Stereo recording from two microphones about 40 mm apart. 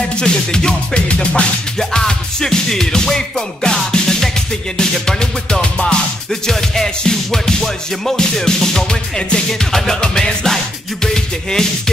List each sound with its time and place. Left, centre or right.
0.2 s music: centre
0.9 s music: left
1.8 s music: centre
6.4 s music: centre